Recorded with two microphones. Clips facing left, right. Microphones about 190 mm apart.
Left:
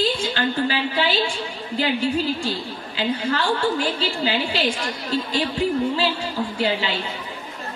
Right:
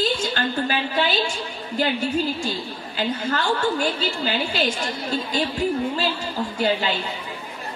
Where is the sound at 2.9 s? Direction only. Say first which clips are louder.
Left 1 dB; 50° right (ahead or behind).